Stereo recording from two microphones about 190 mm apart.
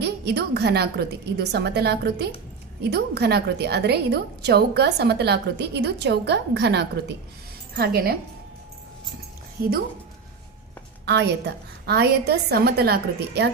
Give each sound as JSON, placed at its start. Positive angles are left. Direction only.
{"t": 0.0, "sound": "a woman's voice", "side_deg": -60}
{"t": 9.6, "sound": "a woman's voice", "side_deg": -50}
{"t": 11.0, "sound": "a woman's voice", "side_deg": -60}